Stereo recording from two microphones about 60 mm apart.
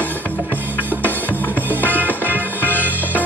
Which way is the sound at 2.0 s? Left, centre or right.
Left.